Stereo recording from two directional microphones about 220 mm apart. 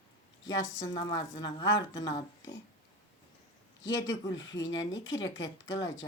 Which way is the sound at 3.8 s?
15° left (ahead or behind).